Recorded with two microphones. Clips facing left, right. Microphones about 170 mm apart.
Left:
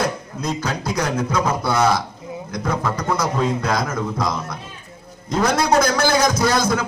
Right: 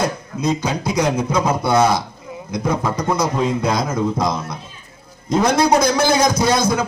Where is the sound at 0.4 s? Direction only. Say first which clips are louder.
Right 4 dB; 15° right (ahead or behind).